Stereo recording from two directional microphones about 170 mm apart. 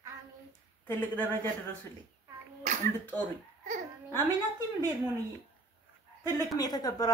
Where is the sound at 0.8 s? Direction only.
10° left (ahead or behind).